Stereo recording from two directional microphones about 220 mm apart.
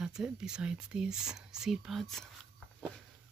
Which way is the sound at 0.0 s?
5° right (ahead or behind).